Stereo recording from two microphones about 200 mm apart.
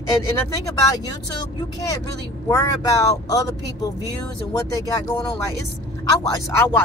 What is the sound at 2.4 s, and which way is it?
Speech, 15° left (ahead or behind).